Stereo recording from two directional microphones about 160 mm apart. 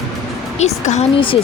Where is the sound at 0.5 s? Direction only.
45° left (ahead or behind).